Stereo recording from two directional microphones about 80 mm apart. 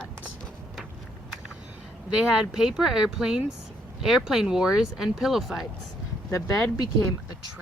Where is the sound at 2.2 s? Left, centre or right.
Centre.